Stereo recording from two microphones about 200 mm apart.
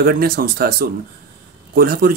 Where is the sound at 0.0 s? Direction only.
50° right (ahead or behind).